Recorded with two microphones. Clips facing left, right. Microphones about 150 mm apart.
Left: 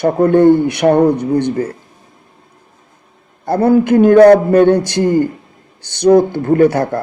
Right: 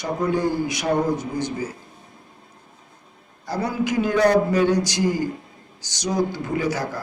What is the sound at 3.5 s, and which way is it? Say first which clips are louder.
Speech: left 13 dB; 55° left (ahead or behind).